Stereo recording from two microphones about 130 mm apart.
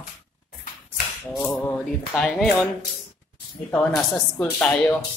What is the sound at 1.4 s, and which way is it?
Speech, 10° left (ahead or behind).